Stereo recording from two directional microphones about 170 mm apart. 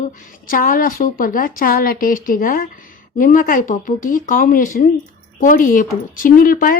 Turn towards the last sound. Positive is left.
turn(degrees=55)  # may be behind; listen again after turning